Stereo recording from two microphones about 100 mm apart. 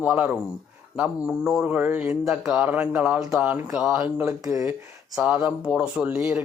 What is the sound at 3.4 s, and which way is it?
Speech, 15° right (ahead or behind).